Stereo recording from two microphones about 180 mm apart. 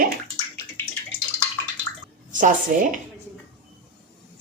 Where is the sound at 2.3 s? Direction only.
45° right (ahead or behind).